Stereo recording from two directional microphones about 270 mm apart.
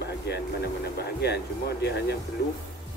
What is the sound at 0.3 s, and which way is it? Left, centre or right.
Music, left.